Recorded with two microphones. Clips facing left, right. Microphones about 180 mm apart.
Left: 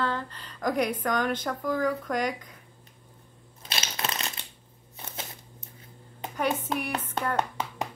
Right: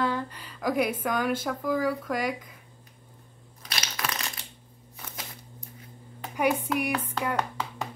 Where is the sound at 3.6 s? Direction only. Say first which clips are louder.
Left 1 dB; 25° left (ahead or behind).